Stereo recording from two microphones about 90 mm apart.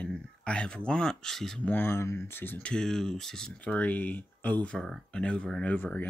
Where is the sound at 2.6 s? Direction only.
5° left (ahead or behind).